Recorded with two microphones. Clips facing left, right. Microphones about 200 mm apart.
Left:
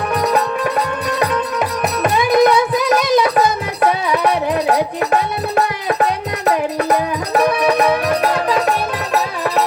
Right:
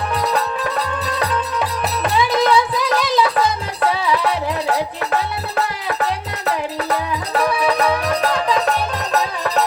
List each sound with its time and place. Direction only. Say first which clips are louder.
1.2 s music: left 3 dB; 15° left (ahead or behind)